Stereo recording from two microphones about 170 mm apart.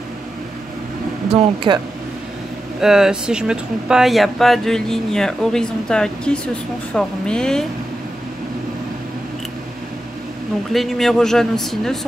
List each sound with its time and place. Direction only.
1.3 s speech: 30° right (ahead or behind)
2.8 s speech: 5° right (ahead or behind)
10.7 s speech: centre (ahead or behind)